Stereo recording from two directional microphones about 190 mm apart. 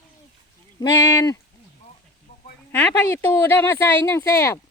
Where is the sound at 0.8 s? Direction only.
20° left (ahead or behind).